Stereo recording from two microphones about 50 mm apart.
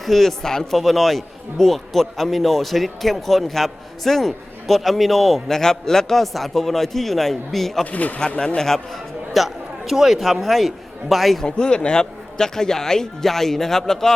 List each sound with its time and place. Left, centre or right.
0.0 s a man's voice: centre
7.9 s speech: left
8.4 s a man's voice: centre
9.3 s a man's voice: centre
11.4 s a man's voice: centre